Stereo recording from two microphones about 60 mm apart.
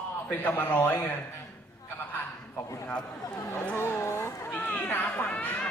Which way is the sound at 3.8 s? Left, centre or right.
Left.